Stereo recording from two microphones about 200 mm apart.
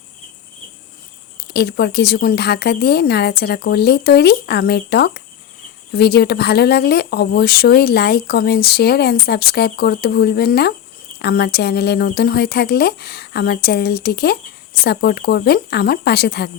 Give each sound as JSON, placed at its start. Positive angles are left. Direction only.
{"t": 1.4, "sound": "speech", "side_deg": 55}